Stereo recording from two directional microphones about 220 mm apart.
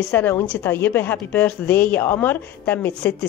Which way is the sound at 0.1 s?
10° left (ahead or behind).